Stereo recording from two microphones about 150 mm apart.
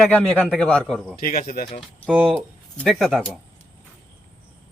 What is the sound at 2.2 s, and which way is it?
Speech, 5° left (ahead or behind).